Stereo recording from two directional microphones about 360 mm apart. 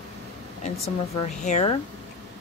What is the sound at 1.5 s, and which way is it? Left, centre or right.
Speech, centre.